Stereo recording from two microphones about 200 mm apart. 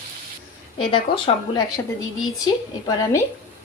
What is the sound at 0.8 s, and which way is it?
Speech, 25° left (ahead or behind).